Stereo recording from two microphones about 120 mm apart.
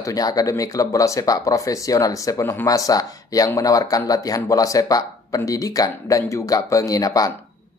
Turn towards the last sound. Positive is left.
turn(degrees=30)  # may be behind; listen again after turning